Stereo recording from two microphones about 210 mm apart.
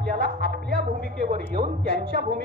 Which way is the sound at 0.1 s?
45° right (ahead or behind).